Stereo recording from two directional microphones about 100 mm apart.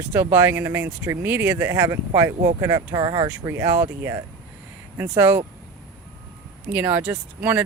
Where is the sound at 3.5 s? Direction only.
25° right (ahead or behind).